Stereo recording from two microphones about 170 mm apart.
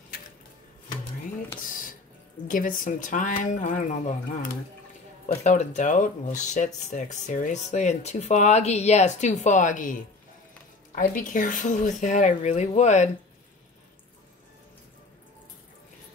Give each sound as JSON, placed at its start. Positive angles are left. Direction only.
{"t": 1.6, "sound": "music", "side_deg": 55}
{"t": 2.4, "sound": "speech", "side_deg": 55}
{"t": 11.0, "sound": "speech", "side_deg": 50}